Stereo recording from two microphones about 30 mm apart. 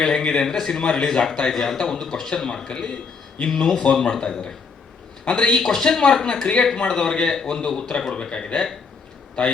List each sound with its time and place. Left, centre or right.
0.0 s a man's voice: left
0.4 s a man's voice: centre
0.7 s a man's voice: left
1.5 s a man's voice: centre; by 3.0 s left
3.6 s a man's voice: centre
4.1 s a man's voice: left
5.5 s a man's voice: centre
9.4 s a man's voice: left